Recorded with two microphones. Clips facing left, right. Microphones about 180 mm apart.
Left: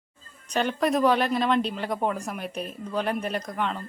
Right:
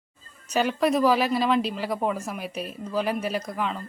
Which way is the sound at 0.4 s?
5° right (ahead or behind).